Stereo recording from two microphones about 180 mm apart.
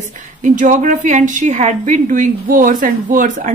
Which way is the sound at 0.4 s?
45° right (ahead or behind).